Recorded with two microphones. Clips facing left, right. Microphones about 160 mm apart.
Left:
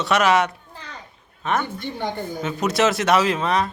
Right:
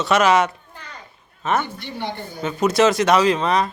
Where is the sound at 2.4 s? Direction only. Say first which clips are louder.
Right 4 dB; centre (ahead or behind).